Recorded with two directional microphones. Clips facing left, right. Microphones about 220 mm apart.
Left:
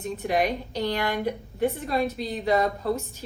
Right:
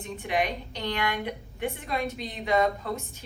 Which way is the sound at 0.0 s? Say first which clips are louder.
Left 4 dB; 40° left (ahead or behind).